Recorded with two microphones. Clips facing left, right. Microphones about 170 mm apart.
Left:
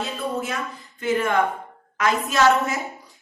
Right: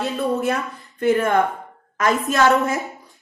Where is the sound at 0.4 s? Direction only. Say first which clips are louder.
Right 7 dB; 55° right (ahead or behind).